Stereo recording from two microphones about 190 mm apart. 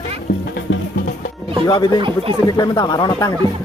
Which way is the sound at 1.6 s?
20° left (ahead or behind).